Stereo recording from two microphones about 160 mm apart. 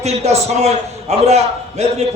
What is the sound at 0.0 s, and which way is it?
Speech, 40° right (ahead or behind).